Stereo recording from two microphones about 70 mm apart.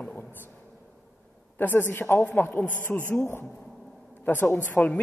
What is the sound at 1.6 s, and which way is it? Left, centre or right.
A man's voice, left.